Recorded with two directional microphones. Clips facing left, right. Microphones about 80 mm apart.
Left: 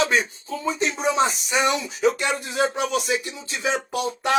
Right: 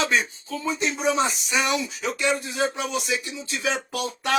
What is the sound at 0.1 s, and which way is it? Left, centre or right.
Speech, left.